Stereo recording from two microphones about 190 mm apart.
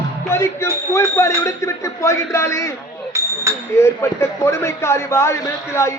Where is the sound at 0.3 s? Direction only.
15° left (ahead or behind).